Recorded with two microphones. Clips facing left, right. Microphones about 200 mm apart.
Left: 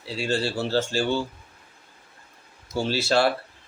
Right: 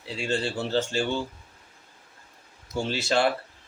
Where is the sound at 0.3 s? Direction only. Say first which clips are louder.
Left 2 dB; 20° right (ahead or behind).